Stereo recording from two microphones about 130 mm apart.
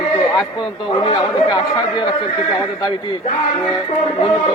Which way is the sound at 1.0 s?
35° left (ahead or behind).